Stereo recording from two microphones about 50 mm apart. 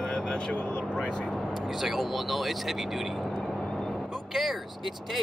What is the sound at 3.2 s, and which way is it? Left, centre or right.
Vehicle, centre.